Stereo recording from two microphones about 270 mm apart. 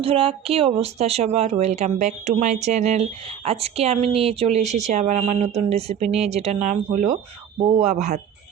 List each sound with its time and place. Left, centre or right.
0.0 s a woman's voice: centre